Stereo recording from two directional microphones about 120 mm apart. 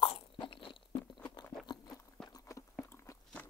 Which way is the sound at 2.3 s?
30° left (ahead or behind).